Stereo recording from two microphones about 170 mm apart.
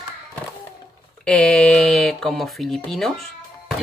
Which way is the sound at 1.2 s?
5° left (ahead or behind).